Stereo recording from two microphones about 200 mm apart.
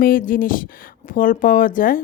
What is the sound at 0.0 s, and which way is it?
Speech, 45° left (ahead or behind).